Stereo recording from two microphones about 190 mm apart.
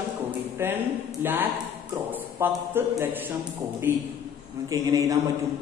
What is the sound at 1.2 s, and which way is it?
A man's voice, 10° right (ahead or behind).